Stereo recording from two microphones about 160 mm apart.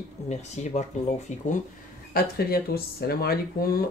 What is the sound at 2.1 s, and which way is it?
Speech, 70° left (ahead or behind).